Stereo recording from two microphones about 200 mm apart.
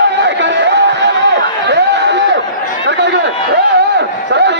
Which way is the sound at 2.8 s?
60° right (ahead or behind).